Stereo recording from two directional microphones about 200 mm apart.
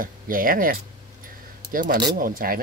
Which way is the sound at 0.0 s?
45° right (ahead or behind).